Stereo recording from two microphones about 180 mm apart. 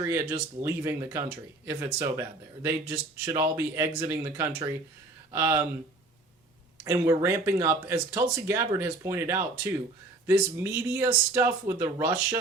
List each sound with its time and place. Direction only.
0.0 s speech: 15° right (ahead or behind)
6.8 s speech: 15° right (ahead or behind)